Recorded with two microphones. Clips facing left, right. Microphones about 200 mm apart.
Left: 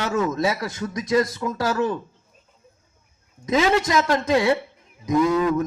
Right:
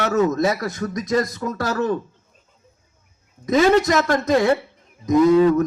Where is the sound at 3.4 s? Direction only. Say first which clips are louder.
Right 4 dB; 40° right (ahead or behind).